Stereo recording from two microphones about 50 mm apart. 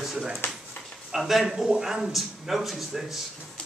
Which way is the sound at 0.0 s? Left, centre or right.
Centre.